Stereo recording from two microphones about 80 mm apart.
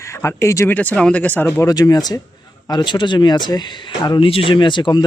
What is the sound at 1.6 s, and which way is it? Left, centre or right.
Speech, left.